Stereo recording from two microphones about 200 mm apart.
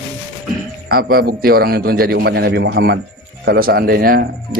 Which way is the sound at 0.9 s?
50° right (ahead or behind).